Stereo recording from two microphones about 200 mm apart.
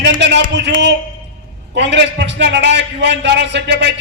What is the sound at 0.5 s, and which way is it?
Speech, 60° right (ahead or behind).